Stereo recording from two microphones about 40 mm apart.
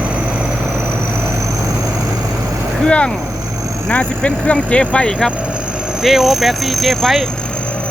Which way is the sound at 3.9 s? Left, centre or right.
Left.